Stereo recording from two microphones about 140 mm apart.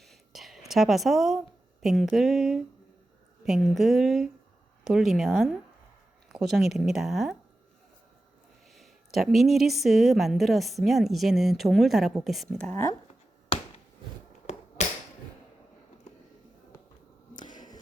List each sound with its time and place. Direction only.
0.0 s whispering: centre (ahead or behind)
1.8 s a woman's voice: centre (ahead or behind)
8.7 s a woman's voice: centre (ahead or behind)
12.7 s speech: 20° left (ahead or behind)
14.8 s a sound: 55° left (ahead or behind)
17.3 s a sound: 30° left (ahead or behind)